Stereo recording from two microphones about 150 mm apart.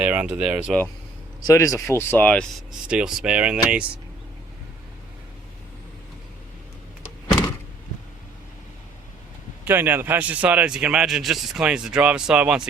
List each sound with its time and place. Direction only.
0.0 s speech: 10° right (ahead or behind)
1.5 s a man's voice: 20° left (ahead or behind); by 3.8 s 10° right (ahead or behind)
9.6 s a man's voice: 15° right (ahead or behind)